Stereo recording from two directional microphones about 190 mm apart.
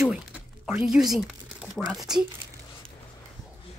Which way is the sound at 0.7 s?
5° right (ahead or behind).